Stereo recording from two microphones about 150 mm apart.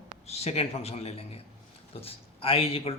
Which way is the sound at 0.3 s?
45° left (ahead or behind).